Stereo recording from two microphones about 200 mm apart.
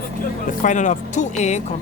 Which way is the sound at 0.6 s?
40° left (ahead or behind).